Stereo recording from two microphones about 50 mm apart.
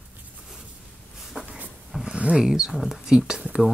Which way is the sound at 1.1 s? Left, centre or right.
Centre.